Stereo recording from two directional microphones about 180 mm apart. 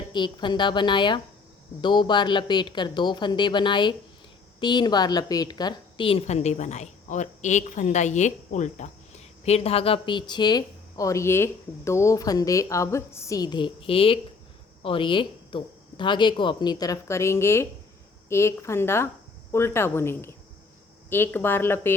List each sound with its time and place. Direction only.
0.1 s a woman's voice: 25° left (ahead or behind)